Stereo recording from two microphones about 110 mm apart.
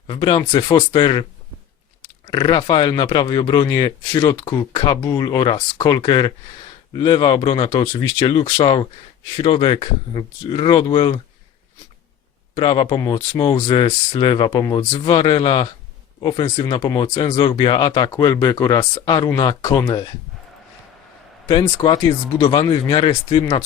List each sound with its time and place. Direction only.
0.1 s speech: 55° left (ahead or behind)
2.5 s speech: 40° left (ahead or behind)
9.4 s speech: 55° left (ahead or behind)
12.5 s speech: 50° left (ahead or behind)
13.0 s speech: 30° left (ahead or behind)
13.4 s speech: 55° left (ahead or behind)
21.8 s speech: 45° left (ahead or behind)